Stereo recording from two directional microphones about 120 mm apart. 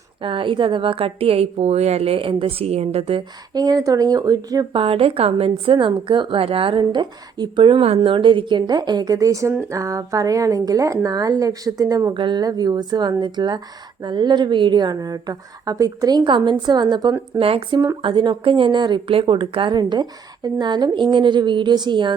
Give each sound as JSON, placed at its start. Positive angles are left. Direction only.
{"t": 0.2, "sound": "a woman's voice", "side_deg": -45}
{"t": 3.5, "sound": "speech", "side_deg": -35}
{"t": 4.7, "sound": "a woman's voice", "side_deg": -50}
{"t": 5.7, "sound": "a woman's voice", "side_deg": -40}
{"t": 12.1, "sound": "speech", "side_deg": -40}
{"t": 17.4, "sound": "a woman's voice", "side_deg": -50}
{"t": 18.0, "sound": "speech", "side_deg": -40}